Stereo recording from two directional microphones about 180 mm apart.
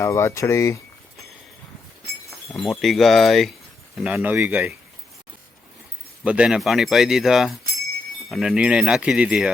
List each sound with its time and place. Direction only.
0.0 s speech: 15° left (ahead or behind)
2.5 s speech: centre (ahead or behind)
6.2 s speech: 5° right (ahead or behind)